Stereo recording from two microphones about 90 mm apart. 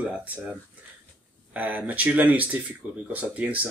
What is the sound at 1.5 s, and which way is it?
Speech, 20° right (ahead or behind).